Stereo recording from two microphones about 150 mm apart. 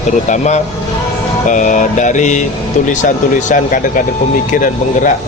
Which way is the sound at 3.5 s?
65° left (ahead or behind).